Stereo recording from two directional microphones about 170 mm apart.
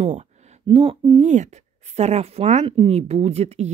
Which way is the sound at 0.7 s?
30° right (ahead or behind).